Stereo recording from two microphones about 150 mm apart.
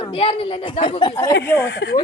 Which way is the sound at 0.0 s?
35° left (ahead or behind).